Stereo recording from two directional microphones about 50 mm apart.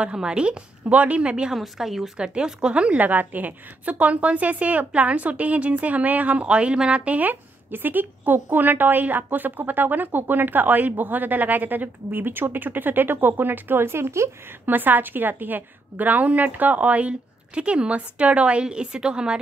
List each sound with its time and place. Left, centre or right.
0.0 s a woman's voice: centre
1.5 s speech: centre
2.1 s a woman's voice: centre
7.2 s a woman's voice: right
14.7 s a woman's voice: right; by 19.4 s centre